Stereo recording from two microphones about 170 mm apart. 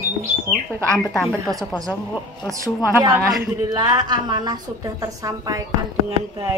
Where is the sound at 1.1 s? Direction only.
Centre (ahead or behind).